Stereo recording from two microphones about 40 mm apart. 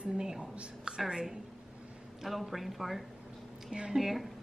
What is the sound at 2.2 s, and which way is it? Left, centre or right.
Speech, centre.